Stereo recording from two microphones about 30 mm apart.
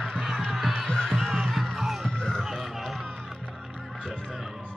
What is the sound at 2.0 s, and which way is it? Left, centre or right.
Music, left.